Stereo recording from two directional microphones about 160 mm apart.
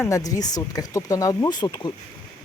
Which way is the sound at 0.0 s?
20° left (ahead or behind).